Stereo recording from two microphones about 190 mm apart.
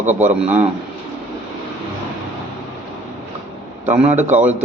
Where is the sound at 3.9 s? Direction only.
40° right (ahead or behind).